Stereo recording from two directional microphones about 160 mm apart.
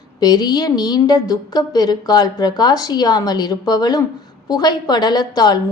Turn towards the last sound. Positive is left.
turn(degrees=25)  # may be behind; listen again after turning